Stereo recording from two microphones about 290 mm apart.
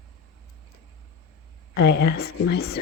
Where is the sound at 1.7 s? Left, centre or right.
Left.